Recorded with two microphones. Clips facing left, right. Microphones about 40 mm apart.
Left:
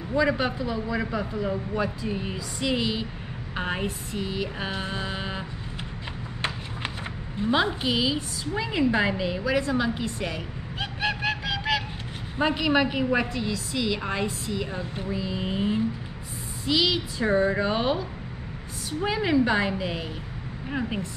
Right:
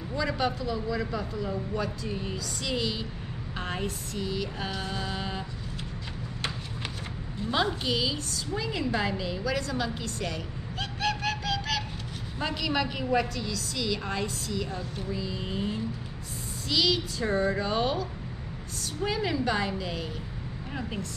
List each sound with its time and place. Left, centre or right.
0.1 s a woman's voice: left
7.3 s a woman's voice: left